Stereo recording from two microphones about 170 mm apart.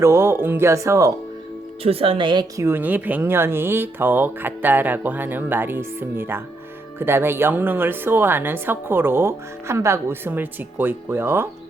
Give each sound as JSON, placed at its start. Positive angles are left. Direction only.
{"t": 0.0, "sound": "a woman's voice", "side_deg": -15}
{"t": 1.8, "sound": "a woman's voice", "side_deg": -35}